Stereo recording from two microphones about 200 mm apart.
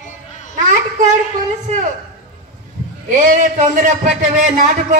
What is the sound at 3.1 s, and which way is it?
Speech, 40° right (ahead or behind).